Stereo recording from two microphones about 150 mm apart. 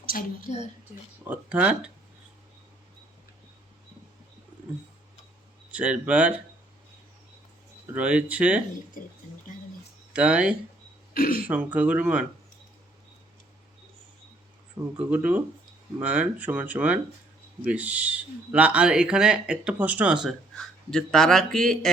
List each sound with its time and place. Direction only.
0.1 s speech: 65° left (ahead or behind)
1.3 s speech: 10° right (ahead or behind)
5.7 s speech: 10° right (ahead or behind)
7.9 s speech: 10° right (ahead or behind)
9.0 s speech: 65° left (ahead or behind)
10.1 s speech: 5° right (ahead or behind)
11.1 s speech: 75° left (ahead or behind)
11.4 s speech: 10° right (ahead or behind)
14.9 s speech: 10° right (ahead or behind)